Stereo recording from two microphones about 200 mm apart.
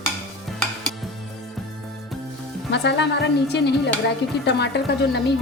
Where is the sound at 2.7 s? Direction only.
60° left (ahead or behind).